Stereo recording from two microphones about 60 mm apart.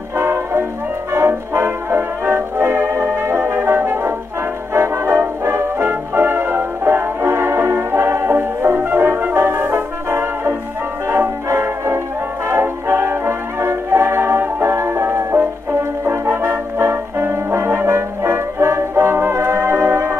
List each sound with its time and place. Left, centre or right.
0.2 s music: right
1.1 s brass instrument: right
4.7 s music: right
8.7 s brass instrument: right
11.4 s music: right
16.1 s brass instrument: right